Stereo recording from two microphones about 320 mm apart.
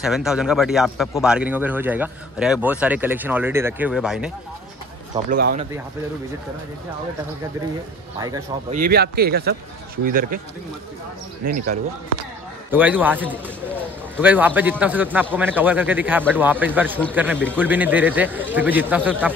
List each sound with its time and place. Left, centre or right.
0.0 s a man's voice: centre
5.1 s speech: right
8.2 s a man's voice: centre
8.8 s speech: right
12.7 s a man's voice: centre